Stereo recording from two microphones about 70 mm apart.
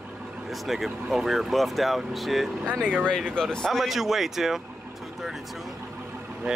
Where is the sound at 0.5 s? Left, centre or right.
Centre.